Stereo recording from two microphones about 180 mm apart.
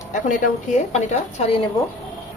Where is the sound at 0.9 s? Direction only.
40° left (ahead or behind).